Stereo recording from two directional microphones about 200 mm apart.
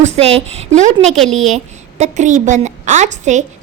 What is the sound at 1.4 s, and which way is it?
A woman's voice, 35° right (ahead or behind).